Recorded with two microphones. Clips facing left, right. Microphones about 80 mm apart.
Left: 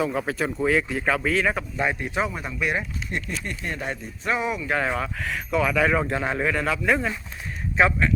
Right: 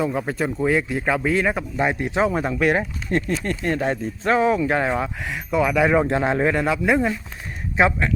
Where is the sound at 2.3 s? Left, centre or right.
Right.